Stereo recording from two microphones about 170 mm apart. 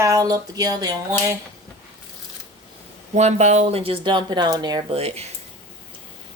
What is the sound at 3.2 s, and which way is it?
Speech, 40° right (ahead or behind).